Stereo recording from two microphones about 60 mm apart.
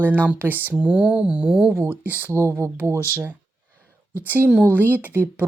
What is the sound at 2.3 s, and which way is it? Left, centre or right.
Speech, right.